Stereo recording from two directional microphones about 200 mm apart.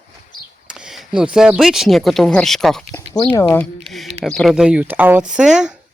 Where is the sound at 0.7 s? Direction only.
5° right (ahead or behind).